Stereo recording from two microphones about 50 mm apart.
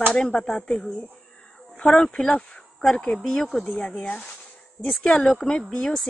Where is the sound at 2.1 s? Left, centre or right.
Left.